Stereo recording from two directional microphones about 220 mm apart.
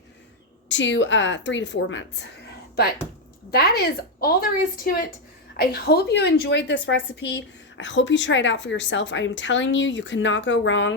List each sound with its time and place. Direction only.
0.7 s a woman's voice: 55° left (ahead or behind)
3.5 s a woman's voice: 45° left (ahead or behind)